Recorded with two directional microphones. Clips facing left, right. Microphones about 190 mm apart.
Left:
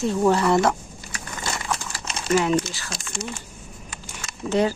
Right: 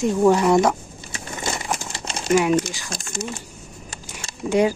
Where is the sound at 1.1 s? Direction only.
20° right (ahead or behind).